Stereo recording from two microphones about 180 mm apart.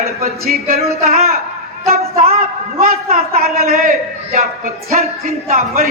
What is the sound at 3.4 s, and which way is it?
Speech, 55° right (ahead or behind).